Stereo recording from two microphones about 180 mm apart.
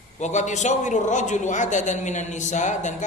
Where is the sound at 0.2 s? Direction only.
40° left (ahead or behind).